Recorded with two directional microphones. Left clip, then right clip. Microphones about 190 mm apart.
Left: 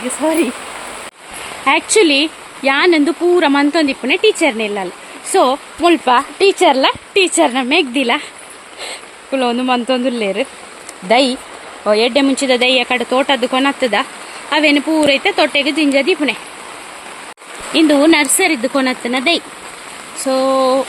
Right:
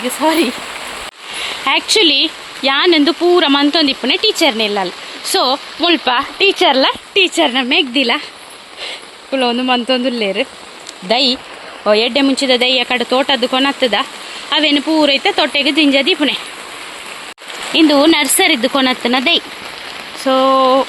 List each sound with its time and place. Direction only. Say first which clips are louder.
0.2 s speech: right 2 dB; 10° right (ahead or behind)
1.6 s speech: even; centre (ahead or behind)
9.3 s speech: right 1 dB; centre (ahead or behind)
17.7 s speech: even; centre (ahead or behind)
20.4 s speech: right 2 dB; 20° right (ahead or behind)